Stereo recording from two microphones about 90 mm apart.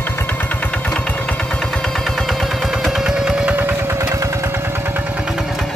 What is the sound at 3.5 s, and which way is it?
Vehicle, 25° right (ahead or behind).